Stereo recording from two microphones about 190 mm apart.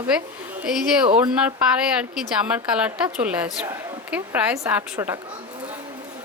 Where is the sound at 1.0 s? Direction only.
25° right (ahead or behind).